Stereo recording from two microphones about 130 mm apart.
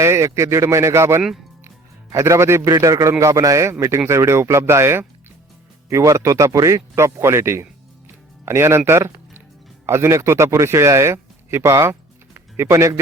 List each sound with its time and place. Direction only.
0.0 s speech: 20° right (ahead or behind)
1.6 s music: 20° right (ahead or behind)
2.7 s speech: 25° right (ahead or behind)